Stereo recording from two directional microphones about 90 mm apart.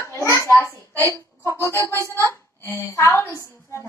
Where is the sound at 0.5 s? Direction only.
25° left (ahead or behind).